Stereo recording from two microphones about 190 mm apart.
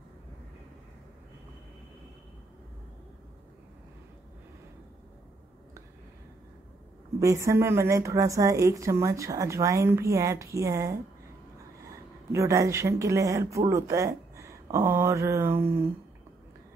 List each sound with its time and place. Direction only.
7.2 s speech: 15° right (ahead or behind)
12.3 s speech: 15° right (ahead or behind)